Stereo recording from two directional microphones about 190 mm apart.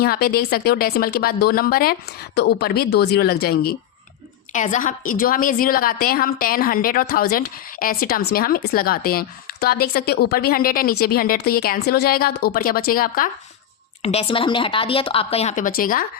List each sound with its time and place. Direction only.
0.0 s a woman's voice: 55° left (ahead or behind)
4.5 s a woman's voice: 40° left (ahead or behind)
14.0 s speech: 30° left (ahead or behind); by 16.0 s 50° left (ahead or behind)